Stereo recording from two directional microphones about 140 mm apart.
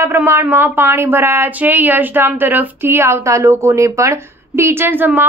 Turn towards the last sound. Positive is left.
turn(degrees=-15)  # may be behind; listen again after turning